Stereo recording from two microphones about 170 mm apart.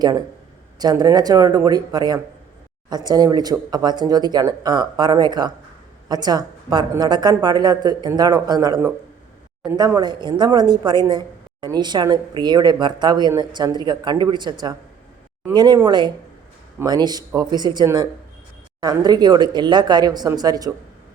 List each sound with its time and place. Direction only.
0.8 s a woman's voice: 25° right (ahead or behind)